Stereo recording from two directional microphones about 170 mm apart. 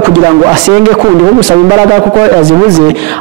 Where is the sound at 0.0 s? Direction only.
25° right (ahead or behind).